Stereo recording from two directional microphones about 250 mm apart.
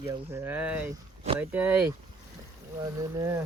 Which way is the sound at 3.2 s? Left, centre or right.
Centre.